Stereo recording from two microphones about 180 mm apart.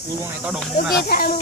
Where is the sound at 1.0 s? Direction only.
55° left (ahead or behind).